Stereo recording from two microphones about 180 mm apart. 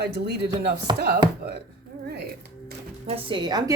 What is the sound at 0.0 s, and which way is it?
Speech, 65° right (ahead or behind).